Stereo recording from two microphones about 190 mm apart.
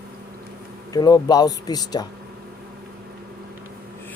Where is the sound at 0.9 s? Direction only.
20° left (ahead or behind).